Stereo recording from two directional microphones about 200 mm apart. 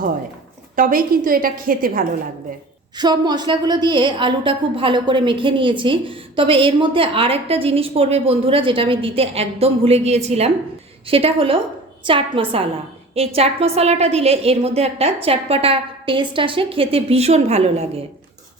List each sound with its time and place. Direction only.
0.8 s a woman's voice: 45° right (ahead or behind)
2.9 s a woman's voice: 20° right (ahead or behind)